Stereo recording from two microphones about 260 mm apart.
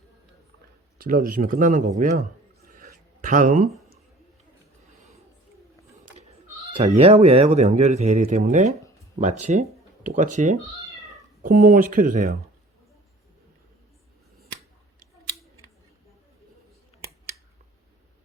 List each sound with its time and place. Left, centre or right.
0.9 s speech: right
2.6 s a sound: right
6.7 s speech: right